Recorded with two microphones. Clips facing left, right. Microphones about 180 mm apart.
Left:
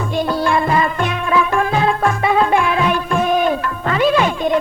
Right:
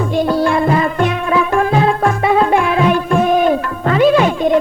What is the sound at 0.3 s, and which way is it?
Music, 40° right (ahead or behind).